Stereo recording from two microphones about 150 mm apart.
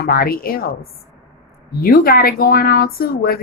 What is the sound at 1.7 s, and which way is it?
A woman's voice, 90° left.